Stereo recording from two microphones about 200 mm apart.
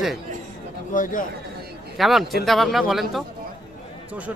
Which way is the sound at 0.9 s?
40° left (ahead or behind).